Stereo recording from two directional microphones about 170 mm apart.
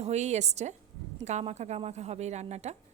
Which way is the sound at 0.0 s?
40° right (ahead or behind).